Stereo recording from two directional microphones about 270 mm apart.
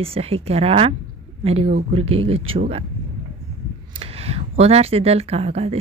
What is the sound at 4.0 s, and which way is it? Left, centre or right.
Speech, right.